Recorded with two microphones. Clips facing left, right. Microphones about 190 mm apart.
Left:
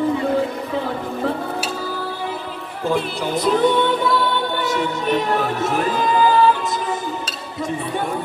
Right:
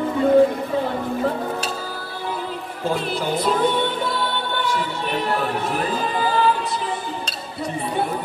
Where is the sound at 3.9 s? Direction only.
45° left (ahead or behind).